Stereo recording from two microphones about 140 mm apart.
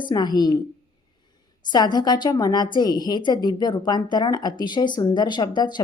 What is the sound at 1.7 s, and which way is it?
A woman's voice, 30° left (ahead or behind).